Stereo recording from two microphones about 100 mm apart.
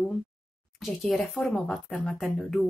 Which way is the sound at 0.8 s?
Centre (ahead or behind).